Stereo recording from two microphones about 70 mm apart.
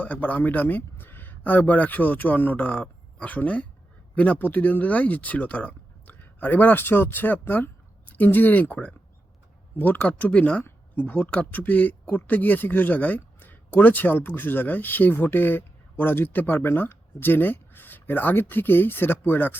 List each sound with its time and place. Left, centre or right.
0.0 s speech: left